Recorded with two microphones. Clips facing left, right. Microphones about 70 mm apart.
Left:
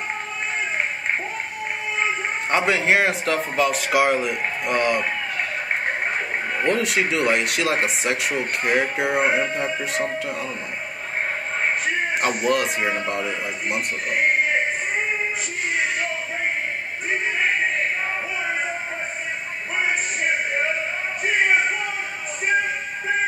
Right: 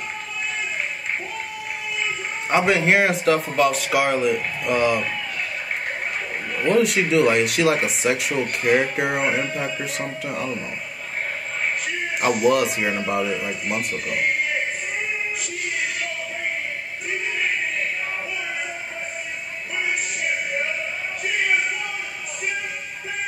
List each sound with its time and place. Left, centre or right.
2.5 s speech: centre
6.6 s speech: centre
12.4 s speech: centre
15.7 s music: left
19.8 s music: left